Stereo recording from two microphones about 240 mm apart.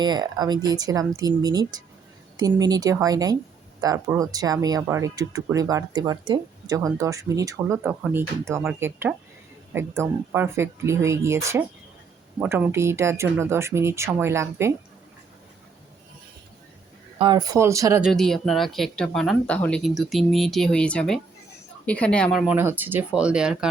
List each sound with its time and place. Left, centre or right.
0.0 s speech: centre
17.2 s speech: centre
18.0 s speech: centre